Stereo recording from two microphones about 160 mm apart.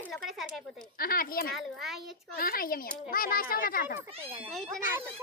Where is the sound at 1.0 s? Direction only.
65° left (ahead or behind).